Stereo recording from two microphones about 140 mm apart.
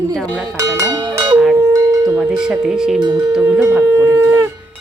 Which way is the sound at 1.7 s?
25° right (ahead or behind).